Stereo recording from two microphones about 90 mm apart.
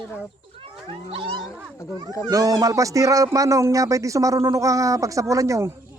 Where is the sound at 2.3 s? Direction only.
40° right (ahead or behind).